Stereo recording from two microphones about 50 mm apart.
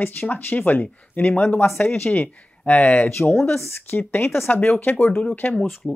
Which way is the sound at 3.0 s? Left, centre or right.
Left.